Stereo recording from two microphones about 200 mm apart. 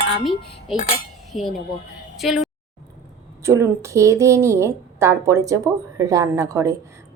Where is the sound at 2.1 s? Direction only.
Centre (ahead or behind).